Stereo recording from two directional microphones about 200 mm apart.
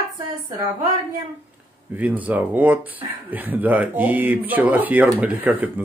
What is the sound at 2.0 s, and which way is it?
Speech, 10° right (ahead or behind).